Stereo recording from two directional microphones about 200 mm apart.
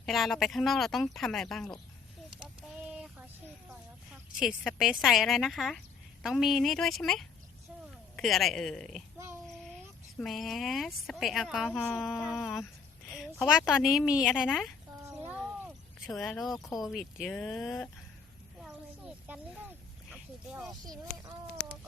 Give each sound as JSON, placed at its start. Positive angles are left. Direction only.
{"t": 0.0, "sound": "a woman's voice", "side_deg": 0}
{"t": 2.4, "sound": "a sound", "side_deg": -5}
{"t": 4.4, "sound": "a woman's voice", "side_deg": 0}
{"t": 10.2, "sound": "a woman's voice", "side_deg": 0}
{"t": 15.1, "sound": "cat", "side_deg": -5}
{"t": 16.8, "sound": "a woman's voice", "side_deg": 0}
{"t": 18.6, "sound": "a sound", "side_deg": -5}
{"t": 20.5, "sound": "a woman's voice", "side_deg": 0}
{"t": 20.8, "sound": "speech", "side_deg": -20}